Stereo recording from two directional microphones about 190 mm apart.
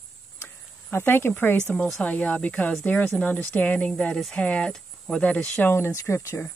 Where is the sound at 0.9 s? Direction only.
10° left (ahead or behind).